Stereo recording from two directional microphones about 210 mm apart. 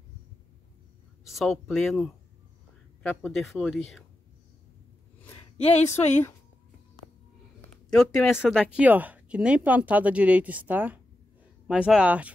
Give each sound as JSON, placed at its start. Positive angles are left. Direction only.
{"t": 1.2, "sound": "speech", "side_deg": 0}
{"t": 5.9, "sound": "a woman's voice", "side_deg": 30}
{"t": 7.9, "sound": "speech", "side_deg": 5}